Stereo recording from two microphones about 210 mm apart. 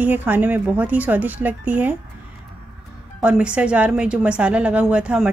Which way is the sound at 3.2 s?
5° right (ahead or behind).